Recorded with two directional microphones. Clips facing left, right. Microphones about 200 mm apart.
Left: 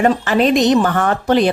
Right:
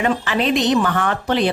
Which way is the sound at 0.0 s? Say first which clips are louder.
Left 5 dB; 45° left (ahead or behind).